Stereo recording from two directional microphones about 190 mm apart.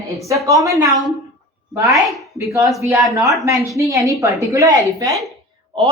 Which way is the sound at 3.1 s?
15° right (ahead or behind).